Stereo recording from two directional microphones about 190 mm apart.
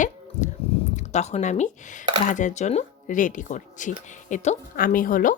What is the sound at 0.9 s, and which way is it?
Speech, 35° left (ahead or behind).